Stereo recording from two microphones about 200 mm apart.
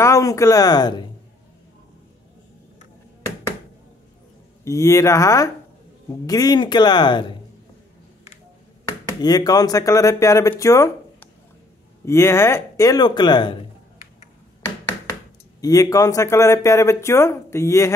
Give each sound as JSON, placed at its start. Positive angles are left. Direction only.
{"t": 0.0, "sound": "speech", "side_deg": 15}
{"t": 4.6, "sound": "speech", "side_deg": 15}
{"t": 9.2, "sound": "speech", "side_deg": 20}
{"t": 15.6, "sound": "speech", "side_deg": 15}